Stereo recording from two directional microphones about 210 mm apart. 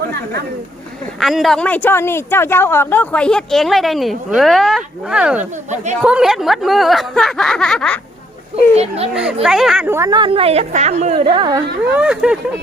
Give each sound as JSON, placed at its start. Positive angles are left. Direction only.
{"t": 1.2, "sound": "speech", "side_deg": 0}
{"t": 8.7, "sound": "a woman's voice", "side_deg": -30}
{"t": 9.1, "sound": "a woman's voice", "side_deg": -5}
{"t": 11.9, "sound": "speech", "side_deg": -5}